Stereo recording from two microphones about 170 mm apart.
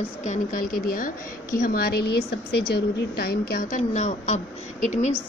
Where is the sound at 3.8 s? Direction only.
45° left (ahead or behind).